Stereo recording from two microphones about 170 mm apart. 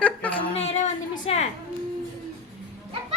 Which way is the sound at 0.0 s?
10° left (ahead or behind).